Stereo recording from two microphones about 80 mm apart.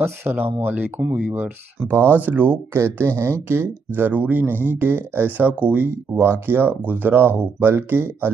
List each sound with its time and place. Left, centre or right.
0.0 s speech: right